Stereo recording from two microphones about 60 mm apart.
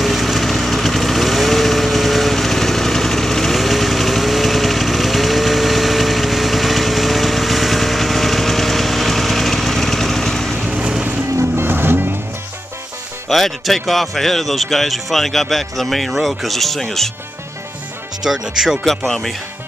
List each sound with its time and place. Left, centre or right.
0.0 s vehicle: centre
10.6 s vehicle: centre
11.3 s music: right
13.3 s speech: centre
18.2 s speech: centre
18.9 s speech: centre